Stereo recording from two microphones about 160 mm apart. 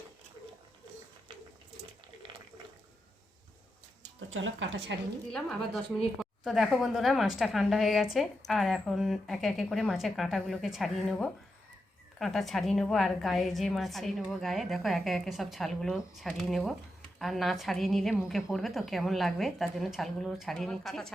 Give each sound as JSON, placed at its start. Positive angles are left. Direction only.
{"t": 4.9, "sound": "a woman's voice", "side_deg": -90}
{"t": 5.3, "sound": "a woman's voice", "side_deg": 0}